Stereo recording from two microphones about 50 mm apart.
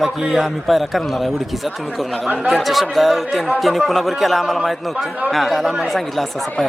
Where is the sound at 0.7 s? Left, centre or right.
Centre.